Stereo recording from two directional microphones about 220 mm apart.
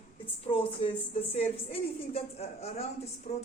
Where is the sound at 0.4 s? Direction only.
25° left (ahead or behind).